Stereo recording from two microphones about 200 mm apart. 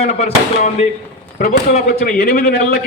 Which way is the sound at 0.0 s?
30° left (ahead or behind).